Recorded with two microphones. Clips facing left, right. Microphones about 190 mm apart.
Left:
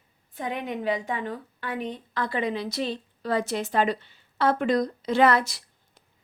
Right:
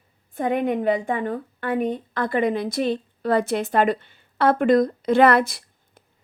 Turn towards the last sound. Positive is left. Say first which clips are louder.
# right 4 dB
turn(degrees=-55)  # may be behind; listen again after turning